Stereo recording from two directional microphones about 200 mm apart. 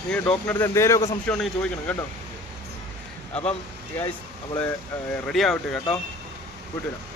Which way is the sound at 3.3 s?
30° left (ahead or behind).